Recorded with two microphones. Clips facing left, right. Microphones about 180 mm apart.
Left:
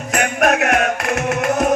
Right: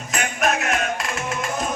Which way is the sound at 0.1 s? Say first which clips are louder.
Left 6 dB; 60° left (ahead or behind).